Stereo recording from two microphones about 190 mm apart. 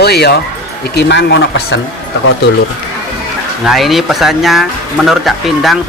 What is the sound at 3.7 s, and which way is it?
Speech, centre (ahead or behind).